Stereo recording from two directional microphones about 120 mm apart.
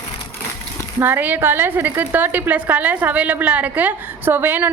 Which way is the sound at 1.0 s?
15° right (ahead or behind).